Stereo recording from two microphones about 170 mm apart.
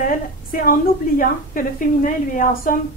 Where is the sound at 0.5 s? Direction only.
55° left (ahead or behind).